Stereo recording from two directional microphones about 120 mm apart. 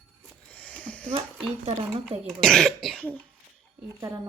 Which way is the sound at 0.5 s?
10° left (ahead or behind).